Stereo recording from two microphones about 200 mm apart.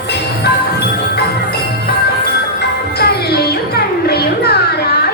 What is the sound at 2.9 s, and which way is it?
Music, 50° left (ahead or behind).